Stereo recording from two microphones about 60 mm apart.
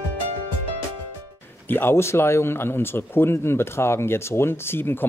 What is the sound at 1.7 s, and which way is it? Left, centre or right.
Speech, left.